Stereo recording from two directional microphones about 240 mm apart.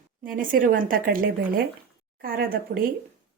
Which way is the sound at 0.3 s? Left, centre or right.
Right.